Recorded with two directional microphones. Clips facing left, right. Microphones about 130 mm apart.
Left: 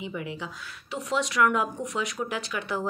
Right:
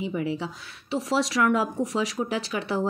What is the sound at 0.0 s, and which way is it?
Speech, 35° right (ahead or behind).